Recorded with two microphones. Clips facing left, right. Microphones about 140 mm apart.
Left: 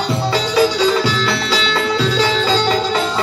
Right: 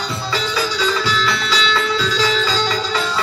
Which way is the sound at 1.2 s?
55° left (ahead or behind).